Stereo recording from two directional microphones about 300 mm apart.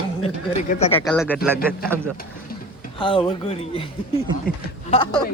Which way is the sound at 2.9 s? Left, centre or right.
Centre.